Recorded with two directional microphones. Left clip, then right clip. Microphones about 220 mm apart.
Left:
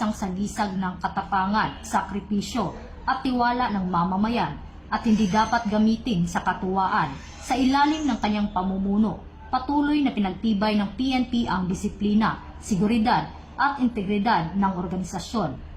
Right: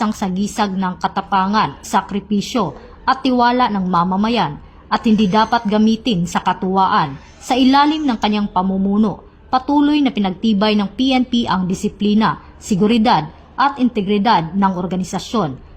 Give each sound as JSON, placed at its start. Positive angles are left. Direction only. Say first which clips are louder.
{"t": 0.0, "sound": "speech", "louder": "right 8 dB", "side_deg": -35}